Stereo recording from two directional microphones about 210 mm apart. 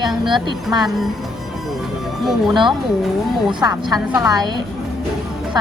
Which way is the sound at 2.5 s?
20° right (ahead or behind).